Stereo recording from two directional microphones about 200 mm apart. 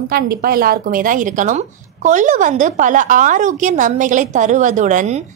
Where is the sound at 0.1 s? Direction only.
50° right (ahead or behind).